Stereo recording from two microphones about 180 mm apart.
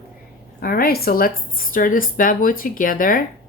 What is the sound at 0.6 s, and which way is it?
Speech, 55° left (ahead or behind).